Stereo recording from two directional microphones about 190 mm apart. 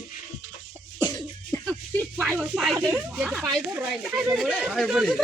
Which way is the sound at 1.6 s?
Centre (ahead or behind).